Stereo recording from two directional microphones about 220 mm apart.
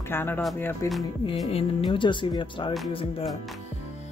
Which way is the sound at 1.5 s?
25° left (ahead or behind).